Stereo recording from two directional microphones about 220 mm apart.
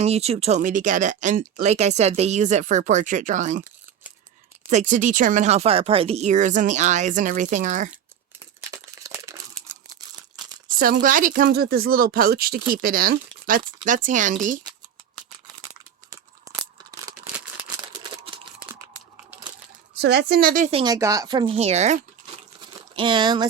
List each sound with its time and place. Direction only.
0.0 s speech: 30° right (ahead or behind)
4.7 s speech: 35° right (ahead or behind)
8.7 s crumpling: 15° right (ahead or behind)
10.8 s speech: 40° right (ahead or behind)
16.9 s a sound: 15° right (ahead or behind)
20.0 s speech: 50° right (ahead or behind); by 23.5 s 20° right (ahead or behind)